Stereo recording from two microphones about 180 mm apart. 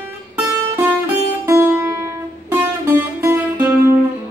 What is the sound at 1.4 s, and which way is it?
Music, 15° right (ahead or behind).